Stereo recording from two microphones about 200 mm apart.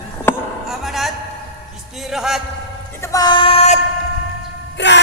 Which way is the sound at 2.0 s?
Centre (ahead or behind).